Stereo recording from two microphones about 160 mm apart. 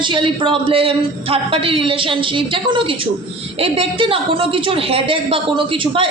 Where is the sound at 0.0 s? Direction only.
30° right (ahead or behind).